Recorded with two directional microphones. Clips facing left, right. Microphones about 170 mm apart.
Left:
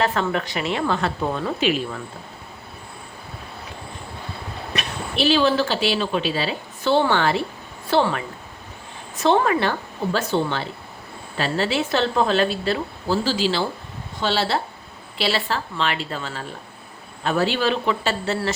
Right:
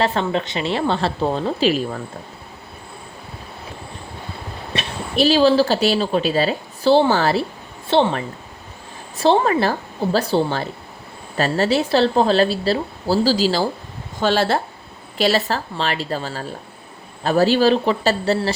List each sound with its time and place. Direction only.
0.0 s speech: 30° right (ahead or behind)
4.7 s a sound: 30° right (ahead or behind)
5.1 s speech: 40° right (ahead or behind)
7.9 s speech: 25° right (ahead or behind)